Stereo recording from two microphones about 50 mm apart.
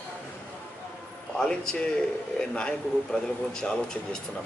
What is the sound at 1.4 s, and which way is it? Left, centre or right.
A man's voice, centre.